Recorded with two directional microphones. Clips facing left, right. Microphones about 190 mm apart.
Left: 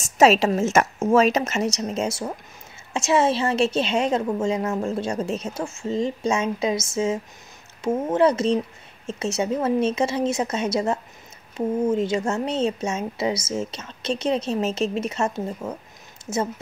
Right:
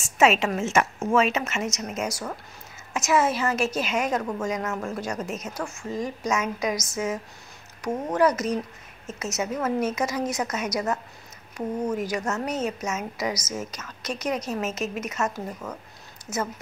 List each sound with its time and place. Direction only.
0.0 s a woman's voice: 35° left (ahead or behind)